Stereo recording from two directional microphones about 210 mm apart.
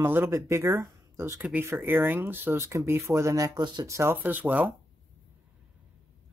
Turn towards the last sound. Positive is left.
turn(degrees=-10)  # may be behind; listen again after turning